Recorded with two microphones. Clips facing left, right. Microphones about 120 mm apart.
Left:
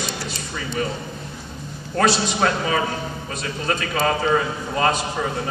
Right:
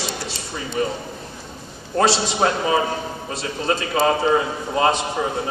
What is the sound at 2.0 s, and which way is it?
A man's voice, 25° right (ahead or behind).